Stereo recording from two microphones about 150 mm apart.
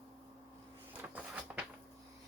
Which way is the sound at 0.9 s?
10° right (ahead or behind).